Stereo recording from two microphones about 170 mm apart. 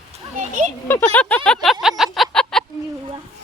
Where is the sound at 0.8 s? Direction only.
10° left (ahead or behind).